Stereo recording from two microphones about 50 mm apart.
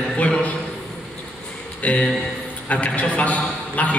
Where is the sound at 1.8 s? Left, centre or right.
Left.